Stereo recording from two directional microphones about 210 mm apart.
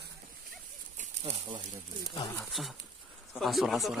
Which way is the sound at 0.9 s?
30° right (ahead or behind).